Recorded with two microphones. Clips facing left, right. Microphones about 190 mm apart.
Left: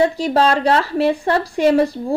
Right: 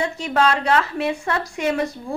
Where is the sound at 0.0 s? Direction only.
35° left (ahead or behind).